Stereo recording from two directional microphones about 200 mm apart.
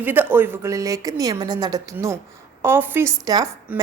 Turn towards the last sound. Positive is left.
turn(degrees=-15)  # may be behind; listen again after turning